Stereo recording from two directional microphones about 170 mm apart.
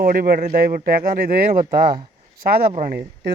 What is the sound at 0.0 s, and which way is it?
Speech, 60° right (ahead or behind).